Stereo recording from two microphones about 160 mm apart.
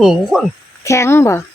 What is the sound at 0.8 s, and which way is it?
Music, 20° left (ahead or behind).